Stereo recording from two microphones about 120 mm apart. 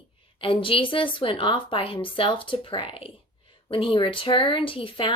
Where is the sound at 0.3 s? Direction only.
45° left (ahead or behind).